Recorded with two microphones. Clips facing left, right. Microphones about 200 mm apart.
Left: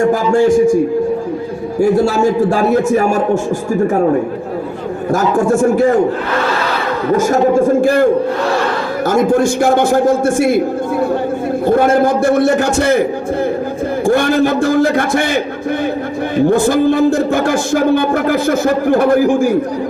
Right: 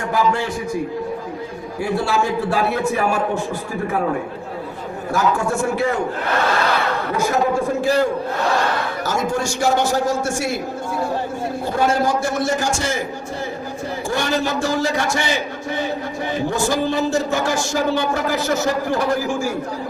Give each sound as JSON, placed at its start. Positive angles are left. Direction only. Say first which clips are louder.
{"t": 0.3, "sound": "a man's voice", "louder": "left 14 dB", "side_deg": 45}
{"t": 1.8, "sound": "a man's voice", "louder": "left 9 dB", "side_deg": 45}
{"t": 5.1, "sound": "a man's voice", "louder": "left 7 dB", "side_deg": 45}
{"t": 7.1, "sound": "a man's voice", "louder": "left 9 dB", "side_deg": 45}
{"t": 11.6, "sound": "a man's voice", "louder": "left 8 dB", "side_deg": 55}
{"t": 16.5, "sound": "a man's voice", "louder": "left 9 dB", "side_deg": 55}